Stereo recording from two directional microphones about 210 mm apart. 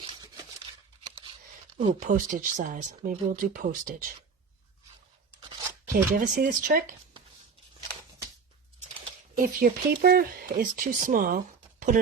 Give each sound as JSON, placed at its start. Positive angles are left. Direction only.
{"t": 2.0, "sound": "speech", "side_deg": -35}
{"t": 5.9, "sound": "speech", "side_deg": -45}
{"t": 9.3, "sound": "speech", "side_deg": -40}